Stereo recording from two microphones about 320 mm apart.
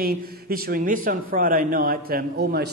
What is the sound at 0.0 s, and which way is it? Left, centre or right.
A man's voice, right.